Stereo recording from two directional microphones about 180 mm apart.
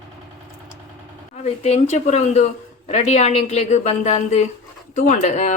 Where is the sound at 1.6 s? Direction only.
40° left (ahead or behind).